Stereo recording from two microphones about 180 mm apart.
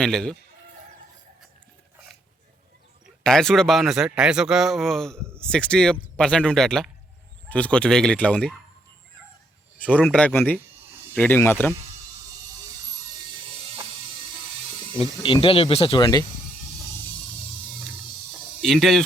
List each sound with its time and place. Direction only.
0.0 s a man's voice: 5° left (ahead or behind)
3.2 s a man's voice: centre (ahead or behind)
9.7 s speech: 10° left (ahead or behind)
15.2 s speech: 30° left (ahead or behind)
18.6 s a man's voice: centre (ahead or behind)